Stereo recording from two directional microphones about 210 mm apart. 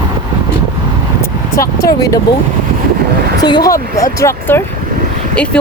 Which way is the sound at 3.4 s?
20° left (ahead or behind).